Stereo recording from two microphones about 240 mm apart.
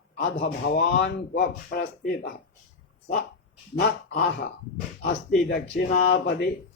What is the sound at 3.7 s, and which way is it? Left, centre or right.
Speech, left.